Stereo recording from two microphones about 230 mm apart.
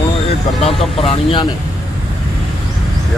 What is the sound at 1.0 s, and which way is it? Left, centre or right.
Speech, left.